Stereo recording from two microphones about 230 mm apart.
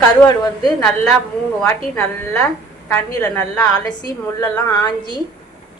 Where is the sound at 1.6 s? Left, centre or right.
Centre.